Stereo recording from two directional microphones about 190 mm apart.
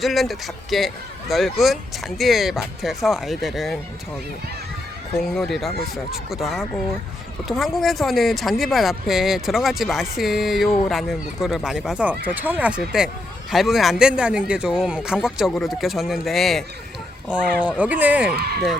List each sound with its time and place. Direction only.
0.0 s speech: centre (ahead or behind)
5.2 s speech: centre (ahead or behind)
17.7 s speech: 10° right (ahead or behind)
18.3 s speech: 55° right (ahead or behind)